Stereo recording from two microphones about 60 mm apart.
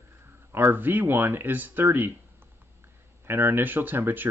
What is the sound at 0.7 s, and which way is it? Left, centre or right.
Speech, right.